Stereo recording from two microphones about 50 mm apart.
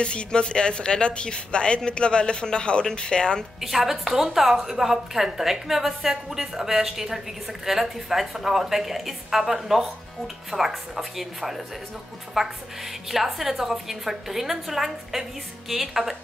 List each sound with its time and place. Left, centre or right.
0.0 s a woman's voice: left
3.6 s a woman's voice: centre